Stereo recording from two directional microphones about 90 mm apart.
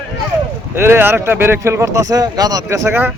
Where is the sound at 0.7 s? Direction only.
25° right (ahead or behind).